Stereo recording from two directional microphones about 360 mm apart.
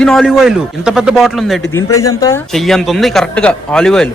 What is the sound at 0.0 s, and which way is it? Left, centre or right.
A woman's voice, centre.